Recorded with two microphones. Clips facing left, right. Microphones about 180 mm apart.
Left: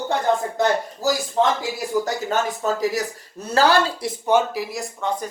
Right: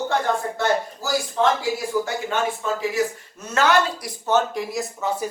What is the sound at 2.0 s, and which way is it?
Speech, 40° left (ahead or behind).